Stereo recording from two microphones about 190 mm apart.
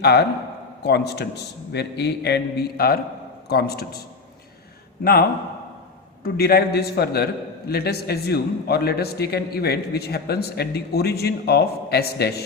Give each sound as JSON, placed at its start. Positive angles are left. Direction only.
{"t": 0.0, "sound": "a man's voice", "side_deg": 60}
{"t": 6.2, "sound": "a man's voice", "side_deg": 55}